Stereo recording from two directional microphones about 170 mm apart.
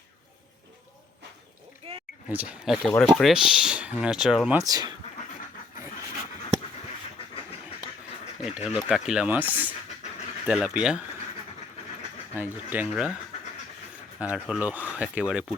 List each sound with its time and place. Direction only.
1.8 s a sound: 35° right (ahead or behind)
2.3 s speech: 10° right (ahead or behind)
4.5 s speech: 20° right (ahead or behind)
8.4 s speech: 5° right (ahead or behind)
12.3 s speech: 10° right (ahead or behind)
14.2 s speech: 10° right (ahead or behind)